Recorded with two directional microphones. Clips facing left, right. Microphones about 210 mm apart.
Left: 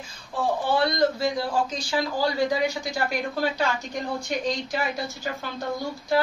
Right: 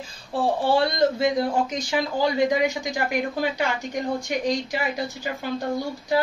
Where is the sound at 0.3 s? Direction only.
30° right (ahead or behind); by 5.3 s 15° right (ahead or behind).